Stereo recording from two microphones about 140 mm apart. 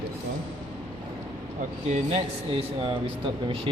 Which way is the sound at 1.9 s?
50° right (ahead or behind).